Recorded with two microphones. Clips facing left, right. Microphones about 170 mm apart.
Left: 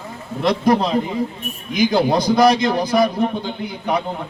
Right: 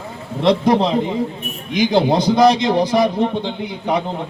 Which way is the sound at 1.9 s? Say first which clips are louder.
Right 2 dB; 25° right (ahead or behind).